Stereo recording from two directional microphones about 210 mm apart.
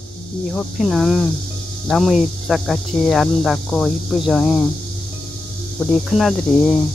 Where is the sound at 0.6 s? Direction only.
Centre (ahead or behind).